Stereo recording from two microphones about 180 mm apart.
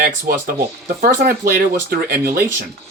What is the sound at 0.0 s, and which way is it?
Speech, 50° right (ahead or behind).